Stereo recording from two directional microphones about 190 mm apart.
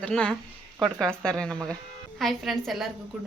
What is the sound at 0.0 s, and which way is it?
A woman's voice, 5° left (ahead or behind).